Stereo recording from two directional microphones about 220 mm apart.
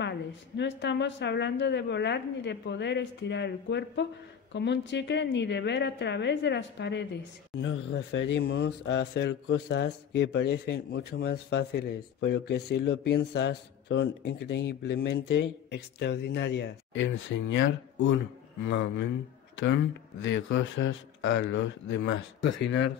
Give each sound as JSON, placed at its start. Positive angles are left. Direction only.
{"t": 0.6, "sound": "speech", "side_deg": 50}